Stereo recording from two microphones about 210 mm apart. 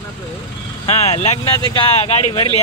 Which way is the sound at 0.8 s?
30° left (ahead or behind).